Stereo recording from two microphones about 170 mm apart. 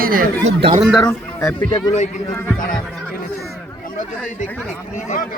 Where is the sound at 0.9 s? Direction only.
5° left (ahead or behind).